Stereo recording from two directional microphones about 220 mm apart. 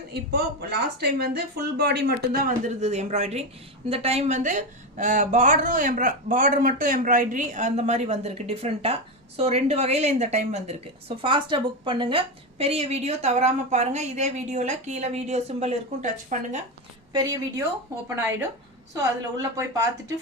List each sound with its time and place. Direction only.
0.1 s speech: 45° right (ahead or behind)
2.6 s a woman's voice: 30° right (ahead or behind)
17.1 s a woman's voice: 20° right (ahead or behind)
18.9 s a woman's voice: 15° right (ahead or behind)